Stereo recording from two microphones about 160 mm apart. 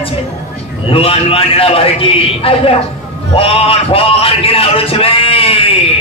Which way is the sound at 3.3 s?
35° left (ahead or behind).